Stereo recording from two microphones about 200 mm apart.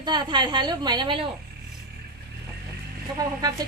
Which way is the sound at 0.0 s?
20° right (ahead or behind).